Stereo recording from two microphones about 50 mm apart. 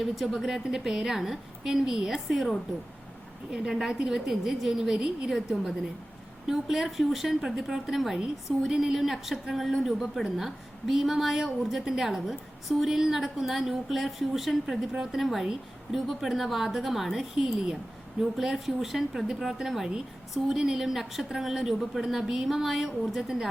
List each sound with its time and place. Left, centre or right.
0.0 s a woman's voice: centre
3.5 s a woman's voice: centre
4.9 s a woman's voice: centre
5.3 s a woman's voice: centre